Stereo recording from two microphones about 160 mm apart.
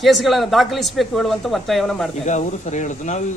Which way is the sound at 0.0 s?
Centre (ahead or behind).